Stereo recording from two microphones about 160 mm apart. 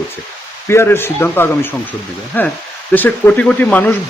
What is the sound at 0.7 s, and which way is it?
Speech, 15° left (ahead or behind).